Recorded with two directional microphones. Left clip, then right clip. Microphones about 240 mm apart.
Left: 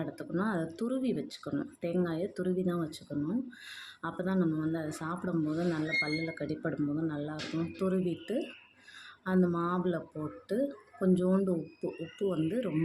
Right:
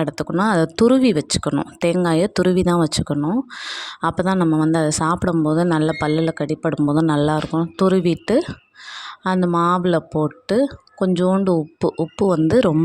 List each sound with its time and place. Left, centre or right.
0.0 s speech: right